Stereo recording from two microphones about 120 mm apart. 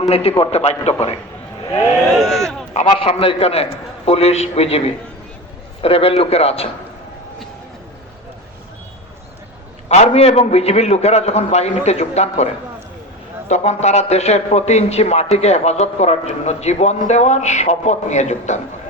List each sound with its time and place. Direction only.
0.0 s a man's voice: 60° left (ahead or behind)
2.1 s a sound: centre (ahead or behind)
2.8 s a man's voice: 50° left (ahead or behind)
10.1 s a man's voice: 60° left (ahead or behind)
13.5 s a man's voice: 70° left (ahead or behind)